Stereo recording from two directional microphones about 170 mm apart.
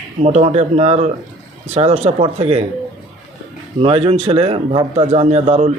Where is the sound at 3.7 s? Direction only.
35° right (ahead or behind).